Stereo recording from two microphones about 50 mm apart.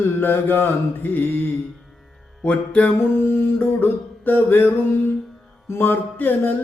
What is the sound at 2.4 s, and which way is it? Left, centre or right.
Mantra, left.